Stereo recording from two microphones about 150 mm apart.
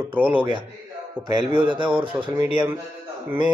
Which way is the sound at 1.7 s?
30° right (ahead or behind).